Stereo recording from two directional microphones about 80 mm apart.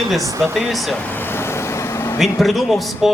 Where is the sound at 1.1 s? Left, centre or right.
Left.